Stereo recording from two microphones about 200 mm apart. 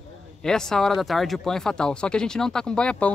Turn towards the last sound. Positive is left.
turn(degrees=5)  # may be behind; listen again after turning